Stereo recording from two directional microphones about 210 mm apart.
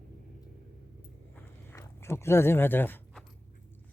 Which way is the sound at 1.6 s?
10° left (ahead or behind).